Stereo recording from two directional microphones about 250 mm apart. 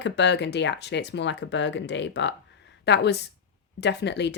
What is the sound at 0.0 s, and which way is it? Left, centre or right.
Speech, left.